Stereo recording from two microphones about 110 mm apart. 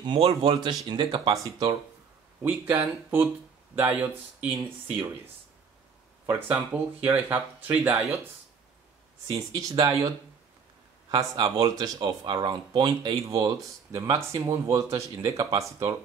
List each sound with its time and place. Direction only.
0.0 s speech: 50° right (ahead or behind)
1.3 s speech: 30° right (ahead or behind)
2.4 s speech: 15° right (ahead or behind)
9.5 s speech: 35° right (ahead or behind)
13.2 s speech: 35° right (ahead or behind)